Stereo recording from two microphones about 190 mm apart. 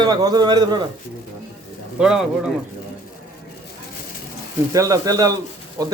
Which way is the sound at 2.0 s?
5° right (ahead or behind).